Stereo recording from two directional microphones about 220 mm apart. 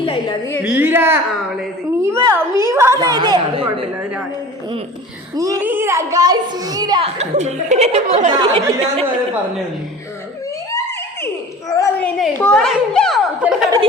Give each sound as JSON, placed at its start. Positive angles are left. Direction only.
{"t": 0.0, "sound": "a woman's voice", "side_deg": 20}
{"t": 0.6, "sound": "a child's voice", "side_deg": -5}
{"t": 5.4, "sound": "a child's voice", "side_deg": -10}
{"t": 10.7, "sound": "a sound", "side_deg": 10}
{"t": 11.8, "sound": "a woman's voice", "side_deg": 5}